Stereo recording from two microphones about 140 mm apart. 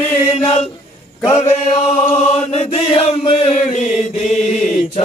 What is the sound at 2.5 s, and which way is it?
Chant, 50° left (ahead or behind).